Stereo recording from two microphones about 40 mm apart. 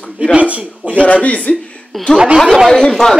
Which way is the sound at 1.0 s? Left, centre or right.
Left.